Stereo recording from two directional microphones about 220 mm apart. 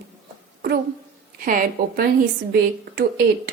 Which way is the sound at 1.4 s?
40° right (ahead or behind).